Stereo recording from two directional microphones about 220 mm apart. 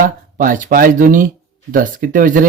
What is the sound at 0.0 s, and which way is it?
Speech, 40° right (ahead or behind).